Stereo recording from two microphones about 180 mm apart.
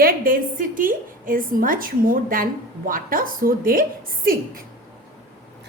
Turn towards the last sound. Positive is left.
turn(degrees=-50)  # may be behind; listen again after turning